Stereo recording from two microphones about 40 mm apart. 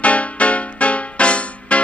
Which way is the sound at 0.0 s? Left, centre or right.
Left.